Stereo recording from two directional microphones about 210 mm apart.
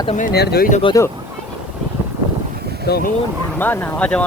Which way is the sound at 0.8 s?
25° left (ahead or behind).